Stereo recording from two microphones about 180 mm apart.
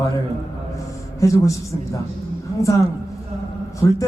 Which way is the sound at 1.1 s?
15° left (ahead or behind).